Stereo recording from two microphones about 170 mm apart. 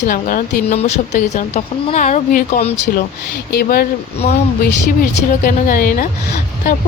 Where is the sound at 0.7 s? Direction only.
40° left (ahead or behind).